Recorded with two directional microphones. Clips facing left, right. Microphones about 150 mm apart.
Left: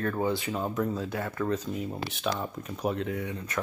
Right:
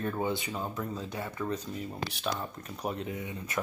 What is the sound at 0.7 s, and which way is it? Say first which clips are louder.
Speech: left 6 dB; 10° right (ahead or behind).